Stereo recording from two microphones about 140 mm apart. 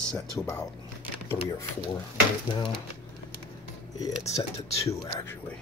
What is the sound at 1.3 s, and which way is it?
Speech, 20° left (ahead or behind).